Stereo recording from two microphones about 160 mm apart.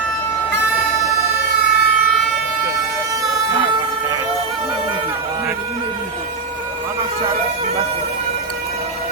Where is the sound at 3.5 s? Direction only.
30° right (ahead or behind).